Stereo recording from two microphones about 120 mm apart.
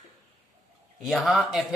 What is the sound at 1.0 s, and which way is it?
Speech, centre (ahead or behind).